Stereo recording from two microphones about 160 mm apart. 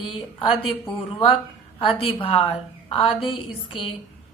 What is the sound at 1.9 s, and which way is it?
A woman's voice, 35° left (ahead or behind).